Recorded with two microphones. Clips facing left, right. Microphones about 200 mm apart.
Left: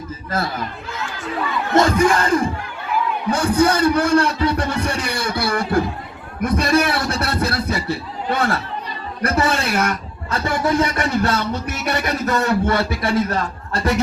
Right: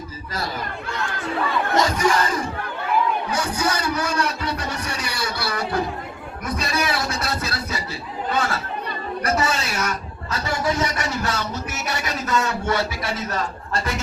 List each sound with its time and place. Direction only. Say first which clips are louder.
1.7 s a man's voice: left 6 dB; 55° left (ahead or behind)